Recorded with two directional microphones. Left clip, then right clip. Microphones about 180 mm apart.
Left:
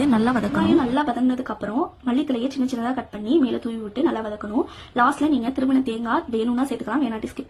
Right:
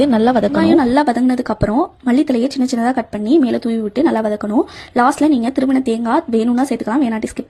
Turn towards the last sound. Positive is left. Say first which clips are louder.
# right 7 dB
turn(degrees=-35)  # may be behind; listen again after turning